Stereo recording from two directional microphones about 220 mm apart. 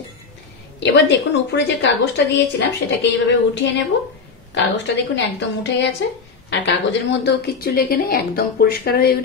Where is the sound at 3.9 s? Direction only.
50° left (ahead or behind).